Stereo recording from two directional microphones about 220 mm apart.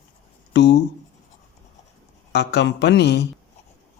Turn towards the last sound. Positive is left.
turn(degrees=50)  # may be behind; listen again after turning